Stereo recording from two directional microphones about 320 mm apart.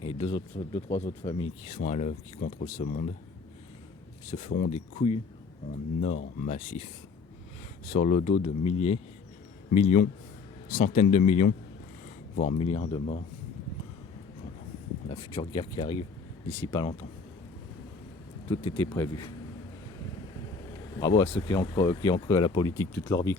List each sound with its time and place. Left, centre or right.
0.1 s speech: centre
4.3 s speech: left
7.9 s speech: left
15.1 s speech: centre
18.4 s speech: centre
21.0 s speech: centre